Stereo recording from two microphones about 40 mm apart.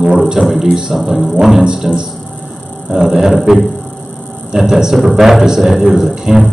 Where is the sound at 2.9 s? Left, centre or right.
Centre.